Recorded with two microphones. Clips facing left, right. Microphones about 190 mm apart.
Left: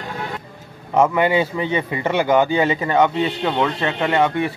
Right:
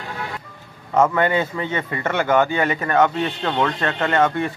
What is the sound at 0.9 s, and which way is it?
A man's voice, 15° left (ahead or behind).